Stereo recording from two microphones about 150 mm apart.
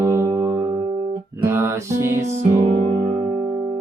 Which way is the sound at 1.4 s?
15° right (ahead or behind).